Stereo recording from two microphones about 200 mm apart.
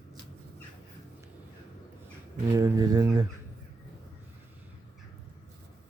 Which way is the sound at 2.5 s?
15° right (ahead or behind).